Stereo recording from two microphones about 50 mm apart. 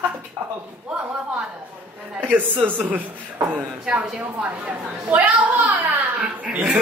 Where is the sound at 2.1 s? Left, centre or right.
Right.